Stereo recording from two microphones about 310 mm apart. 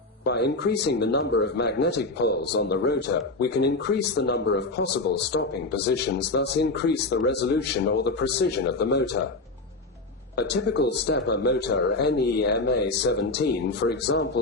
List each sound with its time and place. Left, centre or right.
0.3 s speech: left
10.3 s speech: left